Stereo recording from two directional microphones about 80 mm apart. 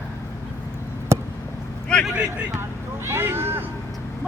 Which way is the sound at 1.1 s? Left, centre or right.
Right.